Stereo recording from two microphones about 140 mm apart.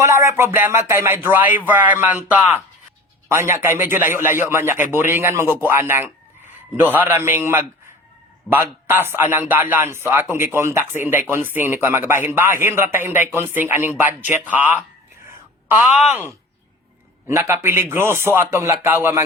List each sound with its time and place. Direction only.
0.0 s a man's voice: 20° right (ahead or behind)
17.2 s a man's voice: 20° right (ahead or behind)